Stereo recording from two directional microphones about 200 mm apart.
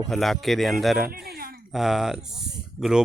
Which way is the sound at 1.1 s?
50° right (ahead or behind).